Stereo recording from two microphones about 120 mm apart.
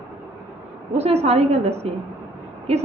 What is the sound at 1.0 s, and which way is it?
A woman's voice, 60° right (ahead or behind).